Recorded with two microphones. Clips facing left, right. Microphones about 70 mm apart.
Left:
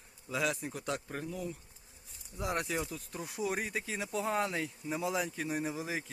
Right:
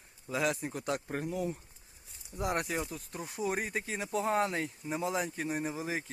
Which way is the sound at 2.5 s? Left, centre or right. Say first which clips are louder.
Even; centre.